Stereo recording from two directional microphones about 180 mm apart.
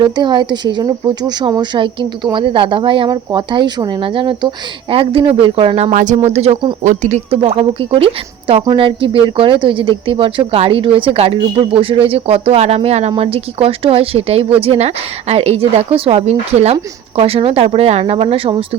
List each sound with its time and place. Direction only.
0.0 s speech: 25° right (ahead or behind)
6.8 s speech: 40° right (ahead or behind)